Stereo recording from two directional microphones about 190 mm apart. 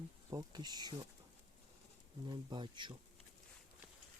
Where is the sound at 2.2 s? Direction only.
25° right (ahead or behind).